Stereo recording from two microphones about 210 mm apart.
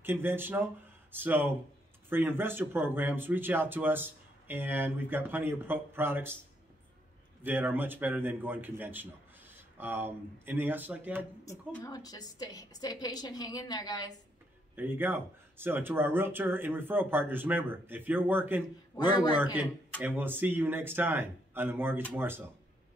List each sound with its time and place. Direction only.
0.0 s speech: 10° right (ahead or behind)
7.4 s speech: 10° right (ahead or behind)
11.4 s a woman's voice: 15° left (ahead or behind)
14.8 s speech: 10° right (ahead or behind)
18.9 s a man's voice: 20° left (ahead or behind)
19.3 s speech: 10° right (ahead or behind)